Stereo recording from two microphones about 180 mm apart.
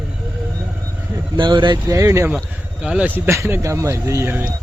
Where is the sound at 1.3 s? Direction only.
25° right (ahead or behind).